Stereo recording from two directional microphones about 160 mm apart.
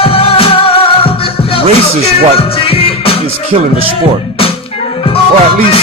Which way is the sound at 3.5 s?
45° right (ahead or behind).